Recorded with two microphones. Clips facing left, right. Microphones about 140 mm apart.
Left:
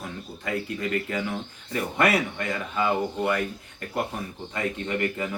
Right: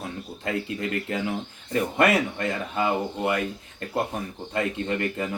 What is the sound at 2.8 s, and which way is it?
Speech, 20° right (ahead or behind).